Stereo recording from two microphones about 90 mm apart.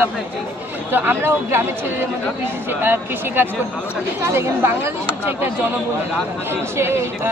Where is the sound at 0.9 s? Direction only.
25° right (ahead or behind).